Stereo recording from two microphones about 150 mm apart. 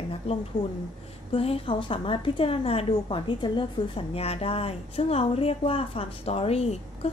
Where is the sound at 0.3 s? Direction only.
40° left (ahead or behind).